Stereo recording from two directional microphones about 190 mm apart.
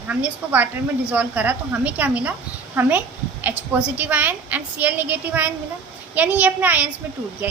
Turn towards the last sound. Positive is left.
turn(degrees=-10)  # may be behind; listen again after turning